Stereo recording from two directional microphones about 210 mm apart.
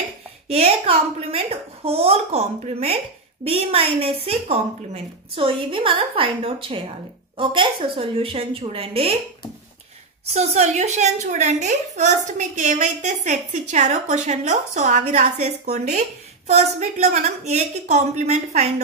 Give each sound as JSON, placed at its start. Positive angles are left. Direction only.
{"t": 0.5, "sound": "a woman's voice", "side_deg": -30}
{"t": 10.2, "sound": "a woman's voice", "side_deg": -30}